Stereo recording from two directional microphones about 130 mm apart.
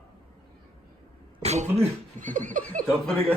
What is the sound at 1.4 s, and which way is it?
Cough, 55° right (ahead or behind).